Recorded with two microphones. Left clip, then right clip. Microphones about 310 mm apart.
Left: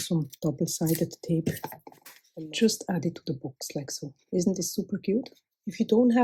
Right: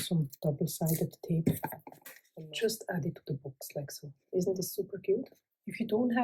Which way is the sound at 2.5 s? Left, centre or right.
Left.